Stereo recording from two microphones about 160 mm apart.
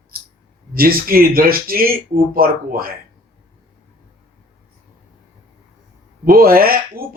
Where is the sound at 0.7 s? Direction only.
65° right (ahead or behind).